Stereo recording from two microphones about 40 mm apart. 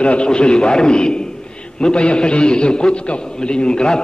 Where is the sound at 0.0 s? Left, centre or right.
Left.